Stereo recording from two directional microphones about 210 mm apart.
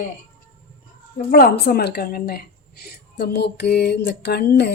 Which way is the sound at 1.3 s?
45° left (ahead or behind).